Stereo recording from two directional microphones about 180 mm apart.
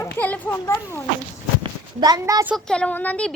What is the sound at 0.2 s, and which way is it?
Children playing, 10° left (ahead or behind).